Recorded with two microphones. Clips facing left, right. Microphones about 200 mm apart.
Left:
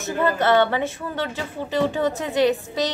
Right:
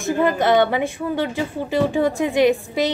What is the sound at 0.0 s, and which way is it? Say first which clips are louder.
Speech: right 3 dB; 15° right (ahead or behind).